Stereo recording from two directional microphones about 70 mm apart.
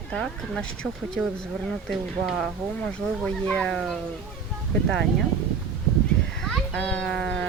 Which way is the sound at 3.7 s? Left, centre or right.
Centre.